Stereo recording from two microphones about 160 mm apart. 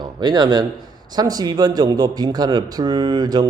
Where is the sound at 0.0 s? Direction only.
25° right (ahead or behind).